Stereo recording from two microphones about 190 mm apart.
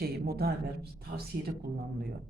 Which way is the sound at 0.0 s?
55° right (ahead or behind).